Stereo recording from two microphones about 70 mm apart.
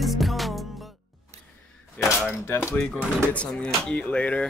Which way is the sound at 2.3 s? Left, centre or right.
Left.